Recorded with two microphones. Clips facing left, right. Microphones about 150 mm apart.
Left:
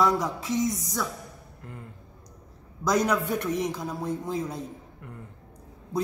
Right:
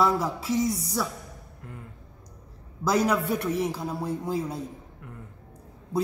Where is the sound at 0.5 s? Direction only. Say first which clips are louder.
Right 1 dB; 35° right (ahead or behind).